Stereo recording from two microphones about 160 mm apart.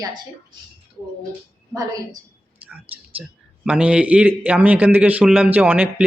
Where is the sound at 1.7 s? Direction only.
20° right (ahead or behind).